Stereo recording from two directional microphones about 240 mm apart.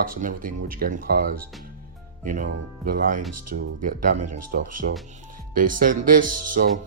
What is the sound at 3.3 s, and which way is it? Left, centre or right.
Speech, right.